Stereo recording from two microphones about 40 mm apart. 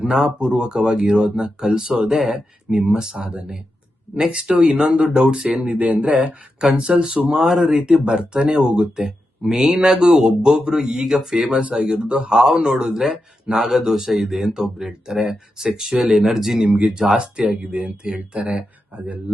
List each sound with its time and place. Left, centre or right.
0.0 s speech: right
5.5 s speech: right
6.1 s speech: right
14.1 s speech: centre
16.6 s speech: right